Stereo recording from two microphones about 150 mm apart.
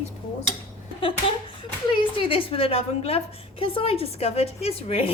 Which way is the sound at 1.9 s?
35° left (ahead or behind).